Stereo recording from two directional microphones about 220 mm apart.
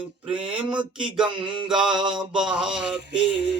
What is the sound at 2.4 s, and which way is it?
Music, 5° right (ahead or behind).